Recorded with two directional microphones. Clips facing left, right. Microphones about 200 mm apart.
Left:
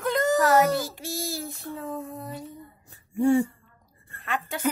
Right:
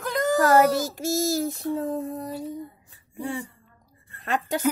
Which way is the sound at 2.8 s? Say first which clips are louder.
Left 13 dB; 45° left (ahead or behind).